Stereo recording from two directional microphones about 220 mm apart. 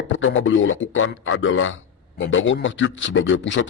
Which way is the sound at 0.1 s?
60° left (ahead or behind).